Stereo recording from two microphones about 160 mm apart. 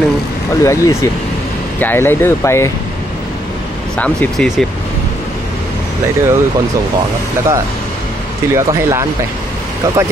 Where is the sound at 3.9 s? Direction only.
5° left (ahead or behind).